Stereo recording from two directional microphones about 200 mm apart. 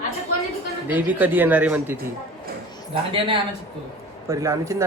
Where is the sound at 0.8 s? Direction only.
10° right (ahead or behind).